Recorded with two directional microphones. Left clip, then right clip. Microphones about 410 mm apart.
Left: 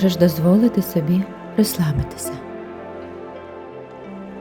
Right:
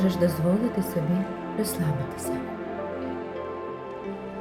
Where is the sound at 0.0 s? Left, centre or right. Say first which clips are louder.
Left 7 dB; left.